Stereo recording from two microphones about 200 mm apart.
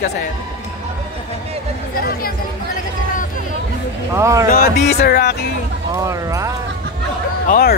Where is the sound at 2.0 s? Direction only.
45° left (ahead or behind).